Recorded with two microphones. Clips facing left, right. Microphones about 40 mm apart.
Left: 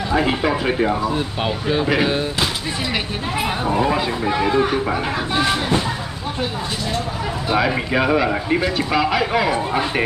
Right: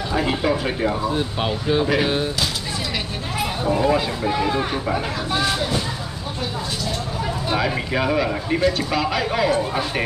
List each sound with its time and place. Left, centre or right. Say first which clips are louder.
0.1 s speech: left 2 dB; centre
1.1 s speech: left 1 dB; centre
3.3 s speech: left 1 dB; centre
7.5 s speech: left 4 dB; centre